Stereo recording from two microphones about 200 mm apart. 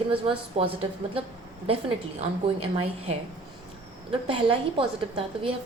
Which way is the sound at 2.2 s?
30° right (ahead or behind).